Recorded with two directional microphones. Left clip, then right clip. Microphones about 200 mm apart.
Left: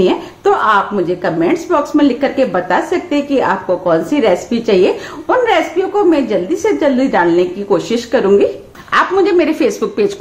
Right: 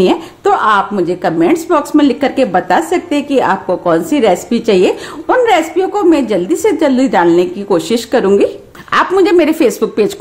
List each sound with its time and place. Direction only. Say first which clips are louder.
0.0 s a woman's voice: right 1 dB; 40° right (ahead or behind)